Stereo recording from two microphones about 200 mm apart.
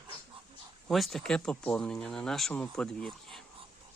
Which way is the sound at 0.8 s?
Centre (ahead or behind).